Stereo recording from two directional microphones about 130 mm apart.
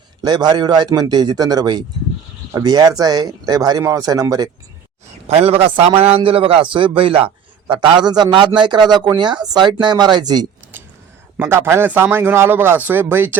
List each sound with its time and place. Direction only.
0.2 s a man's voice: 35° right (ahead or behind)
5.3 s a man's voice: 55° right (ahead or behind); by 10.4 s 35° right (ahead or behind)
11.3 s speech: 20° right (ahead or behind)